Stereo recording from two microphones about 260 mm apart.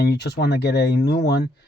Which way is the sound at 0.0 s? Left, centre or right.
Left.